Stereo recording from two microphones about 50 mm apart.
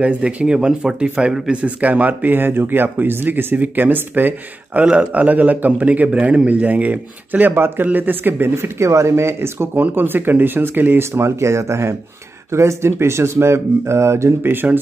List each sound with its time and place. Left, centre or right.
0.0 s speech: right
1.5 s speech: right
3.5 s speech: right
7.5 s speech: right
9.8 s speech: right
11.1 s speech: right
14.4 s speech: right